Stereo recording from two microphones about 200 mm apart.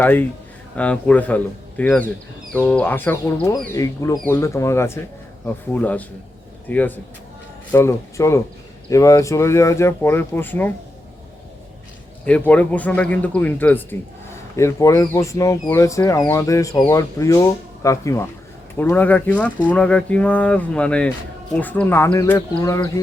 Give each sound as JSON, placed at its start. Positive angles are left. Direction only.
{"t": 0.0, "sound": "a man's voice", "side_deg": 10}
{"t": 12.2, "sound": "a man's voice", "side_deg": 5}